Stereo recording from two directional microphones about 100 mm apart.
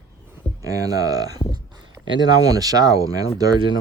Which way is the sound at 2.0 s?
10° left (ahead or behind).